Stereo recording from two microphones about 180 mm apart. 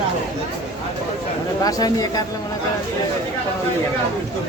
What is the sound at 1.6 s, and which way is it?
Speech, 20° left (ahead or behind).